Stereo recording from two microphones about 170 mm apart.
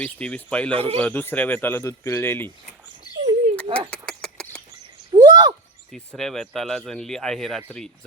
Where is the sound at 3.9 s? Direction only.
5° left (ahead or behind).